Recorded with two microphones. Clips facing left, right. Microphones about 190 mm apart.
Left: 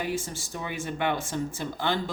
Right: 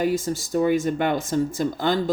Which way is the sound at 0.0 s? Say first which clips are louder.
Right 8 dB; 40° right (ahead or behind).